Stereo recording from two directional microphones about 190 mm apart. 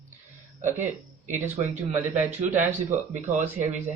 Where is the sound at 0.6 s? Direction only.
40° right (ahead or behind).